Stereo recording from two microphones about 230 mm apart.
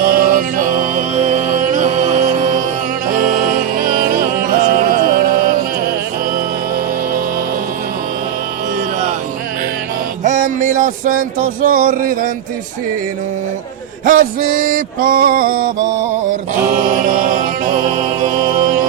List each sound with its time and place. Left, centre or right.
0.1 s music: right
10.2 s music: right
14.0 s a sound: right
16.7 s music: right